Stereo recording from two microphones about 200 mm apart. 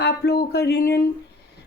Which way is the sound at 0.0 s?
55° left (ahead or behind).